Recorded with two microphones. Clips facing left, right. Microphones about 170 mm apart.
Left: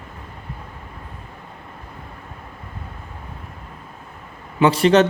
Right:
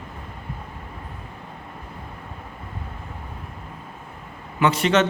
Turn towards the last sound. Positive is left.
turn(degrees=35)  # may be behind; listen again after turning